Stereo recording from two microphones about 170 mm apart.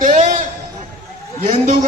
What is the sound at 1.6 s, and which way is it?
Speech, 45° right (ahead or behind).